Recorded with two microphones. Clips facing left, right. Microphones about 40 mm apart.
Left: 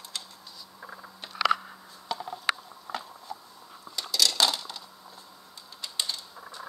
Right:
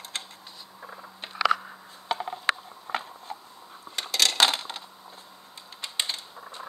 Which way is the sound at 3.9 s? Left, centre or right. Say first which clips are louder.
Right 3 dB; right.